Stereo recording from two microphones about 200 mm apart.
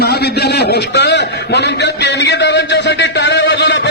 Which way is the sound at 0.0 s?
55° left (ahead or behind).